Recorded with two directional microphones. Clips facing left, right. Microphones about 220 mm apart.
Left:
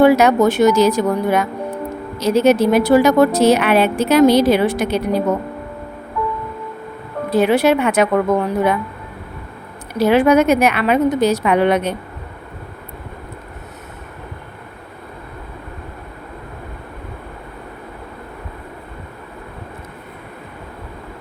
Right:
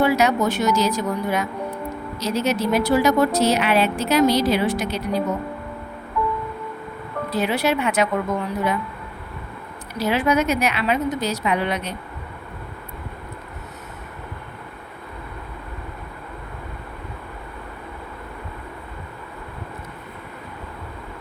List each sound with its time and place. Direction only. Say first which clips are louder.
0.0 s speech: left 7 dB; 55° left (ahead or behind)
7.3 s speech: left 8 dB; 55° left (ahead or behind)
9.9 s speech: left 8 dB; 55° left (ahead or behind)